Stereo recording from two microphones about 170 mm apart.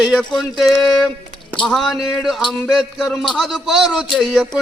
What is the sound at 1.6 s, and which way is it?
Speech, centre (ahead or behind).